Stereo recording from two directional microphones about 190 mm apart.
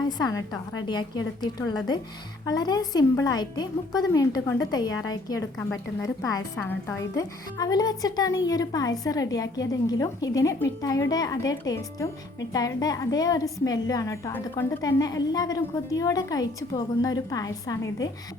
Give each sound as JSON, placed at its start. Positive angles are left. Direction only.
{"t": 0.2, "sound": "a woman's voice", "side_deg": 20}